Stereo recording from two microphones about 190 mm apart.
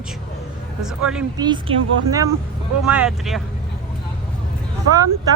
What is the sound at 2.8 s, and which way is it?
Speech, 5° right (ahead or behind).